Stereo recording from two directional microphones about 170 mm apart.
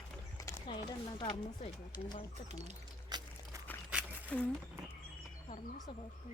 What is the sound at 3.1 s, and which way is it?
Walk, 25° right (ahead or behind).